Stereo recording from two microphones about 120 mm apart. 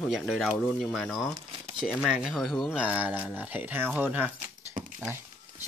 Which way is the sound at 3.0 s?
15° right (ahead or behind).